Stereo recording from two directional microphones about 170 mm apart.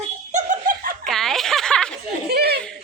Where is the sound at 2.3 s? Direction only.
75° right (ahead or behind).